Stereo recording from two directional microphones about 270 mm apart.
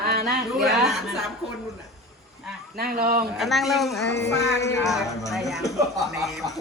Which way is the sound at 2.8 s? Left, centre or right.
Right.